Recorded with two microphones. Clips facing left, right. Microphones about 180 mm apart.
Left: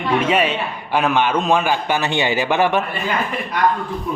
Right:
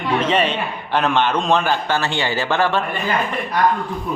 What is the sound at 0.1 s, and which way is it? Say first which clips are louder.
A man's voice: left 1 dB; 10° left (ahead or behind).